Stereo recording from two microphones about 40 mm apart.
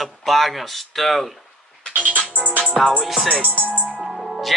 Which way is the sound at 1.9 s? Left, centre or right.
Right.